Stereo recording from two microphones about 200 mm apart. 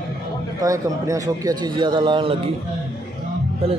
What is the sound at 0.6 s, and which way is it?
A man's voice, 15° right (ahead or behind).